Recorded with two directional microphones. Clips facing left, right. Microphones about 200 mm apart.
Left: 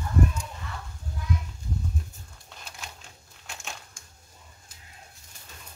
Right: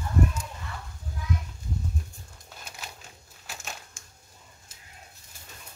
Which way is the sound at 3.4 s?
5° right (ahead or behind).